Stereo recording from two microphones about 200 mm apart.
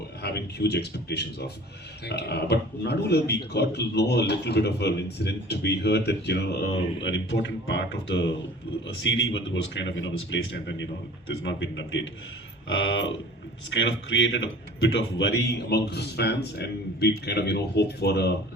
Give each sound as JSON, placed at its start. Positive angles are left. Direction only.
{"t": 0.2, "sound": "a man's voice", "side_deg": 55}